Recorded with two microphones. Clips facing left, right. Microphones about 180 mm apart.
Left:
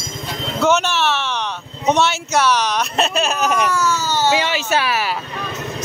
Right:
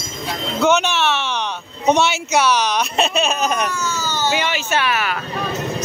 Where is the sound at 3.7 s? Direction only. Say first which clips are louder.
Left 5 dB; 85° left.